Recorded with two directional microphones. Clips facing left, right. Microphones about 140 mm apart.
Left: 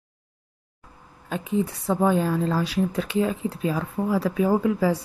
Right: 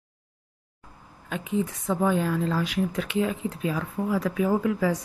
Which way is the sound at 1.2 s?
35° left (ahead or behind).